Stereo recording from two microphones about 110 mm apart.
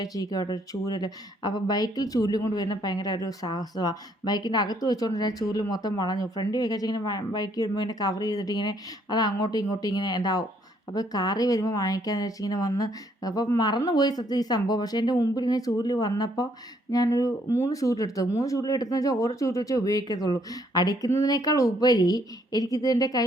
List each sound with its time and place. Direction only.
0.0 s speech: 35° left (ahead or behind)